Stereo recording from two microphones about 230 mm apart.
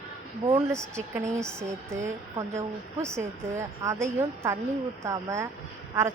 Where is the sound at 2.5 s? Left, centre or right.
Centre.